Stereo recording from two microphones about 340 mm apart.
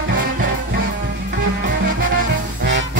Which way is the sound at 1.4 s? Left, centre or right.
Right.